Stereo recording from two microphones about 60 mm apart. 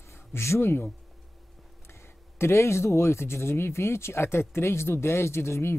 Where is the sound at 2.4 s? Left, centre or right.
Left.